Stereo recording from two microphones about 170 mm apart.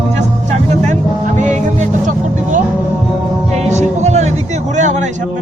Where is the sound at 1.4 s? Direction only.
45° right (ahead or behind).